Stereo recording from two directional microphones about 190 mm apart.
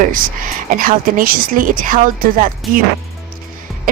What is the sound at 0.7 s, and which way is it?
A woman's voice, 45° right (ahead or behind).